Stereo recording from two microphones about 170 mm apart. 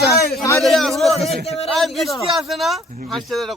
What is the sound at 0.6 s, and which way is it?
Speech, centre (ahead or behind).